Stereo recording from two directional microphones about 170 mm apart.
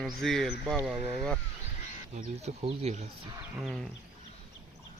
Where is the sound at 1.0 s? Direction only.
35° right (ahead or behind).